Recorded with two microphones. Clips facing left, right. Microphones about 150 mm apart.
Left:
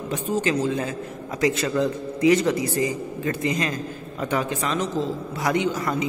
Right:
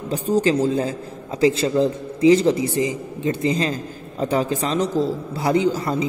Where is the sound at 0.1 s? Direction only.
35° right (ahead or behind).